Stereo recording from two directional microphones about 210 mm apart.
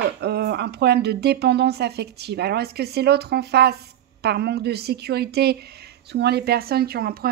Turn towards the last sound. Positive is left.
turn(degrees=-45)  # may be behind; listen again after turning